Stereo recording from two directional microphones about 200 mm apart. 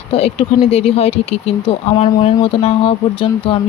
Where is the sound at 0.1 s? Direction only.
30° left (ahead or behind).